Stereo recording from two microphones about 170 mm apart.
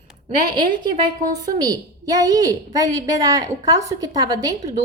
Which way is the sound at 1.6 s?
20° right (ahead or behind).